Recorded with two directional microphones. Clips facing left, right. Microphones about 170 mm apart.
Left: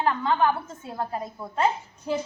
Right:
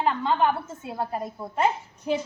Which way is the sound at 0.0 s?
20° right (ahead or behind).